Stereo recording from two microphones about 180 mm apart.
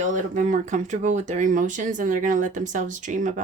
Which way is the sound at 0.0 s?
45° right (ahead or behind).